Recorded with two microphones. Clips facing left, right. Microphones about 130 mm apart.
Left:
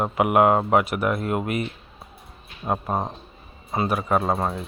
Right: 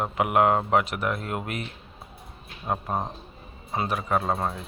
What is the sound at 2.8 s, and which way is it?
Speech, 35° left (ahead or behind).